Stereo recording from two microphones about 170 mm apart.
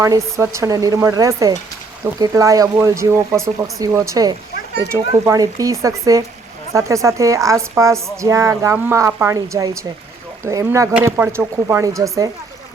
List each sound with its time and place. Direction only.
0.0 s a woman's voice: 15° right (ahead or behind)